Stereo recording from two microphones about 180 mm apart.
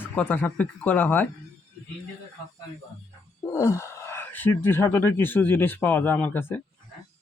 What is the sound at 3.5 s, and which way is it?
Speech, 15° left (ahead or behind).